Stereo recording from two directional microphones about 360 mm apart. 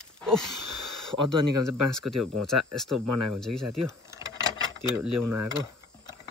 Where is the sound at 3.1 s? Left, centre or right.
Right.